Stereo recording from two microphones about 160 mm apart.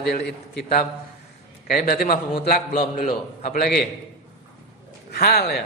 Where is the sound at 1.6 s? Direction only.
65° left (ahead or behind).